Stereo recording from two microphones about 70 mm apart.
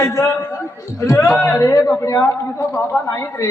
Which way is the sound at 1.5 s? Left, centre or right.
Left.